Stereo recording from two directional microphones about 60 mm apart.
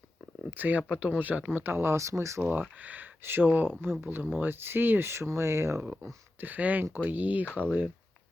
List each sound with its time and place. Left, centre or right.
0.5 s speech: right
2.0 s speech: right
2.4 s speech: right
6.4 s speech: right